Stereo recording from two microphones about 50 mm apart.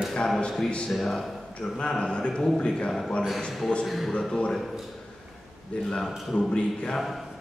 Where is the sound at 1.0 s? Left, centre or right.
Centre.